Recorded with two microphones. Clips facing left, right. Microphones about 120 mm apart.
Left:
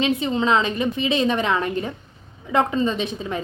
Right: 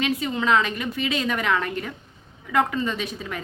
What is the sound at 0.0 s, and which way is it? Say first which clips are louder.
A woman's voice: left 4 dB; 25° left (ahead or behind).